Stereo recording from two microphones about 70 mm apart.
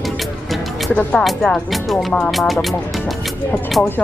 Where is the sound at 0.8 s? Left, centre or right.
Left.